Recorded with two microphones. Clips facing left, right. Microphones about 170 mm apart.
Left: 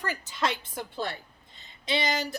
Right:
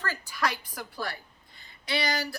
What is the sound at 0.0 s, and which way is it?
Speech, 20° left (ahead or behind).